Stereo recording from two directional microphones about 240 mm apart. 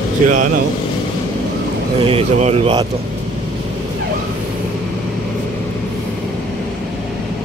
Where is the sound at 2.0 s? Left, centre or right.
Right.